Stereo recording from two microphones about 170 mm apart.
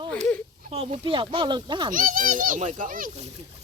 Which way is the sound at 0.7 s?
35° right (ahead or behind).